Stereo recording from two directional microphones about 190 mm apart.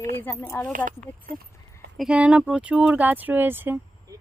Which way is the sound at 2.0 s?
5° right (ahead or behind).